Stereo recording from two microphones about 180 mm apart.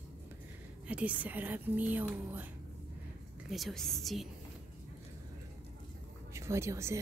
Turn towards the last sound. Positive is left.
turn(degrees=-15)  # may be behind; listen again after turning